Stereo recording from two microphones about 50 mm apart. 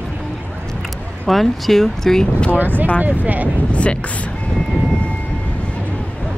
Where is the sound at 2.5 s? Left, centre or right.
Right.